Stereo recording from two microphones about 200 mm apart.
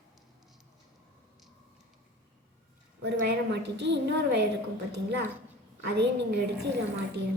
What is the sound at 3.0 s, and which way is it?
A woman's voice, 55° right (ahead or behind).